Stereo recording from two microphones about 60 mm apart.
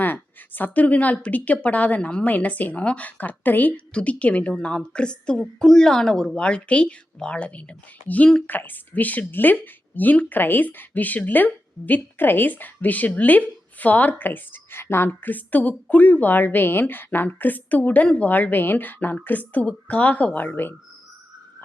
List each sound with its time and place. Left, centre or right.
0.0 s a woman's voice: left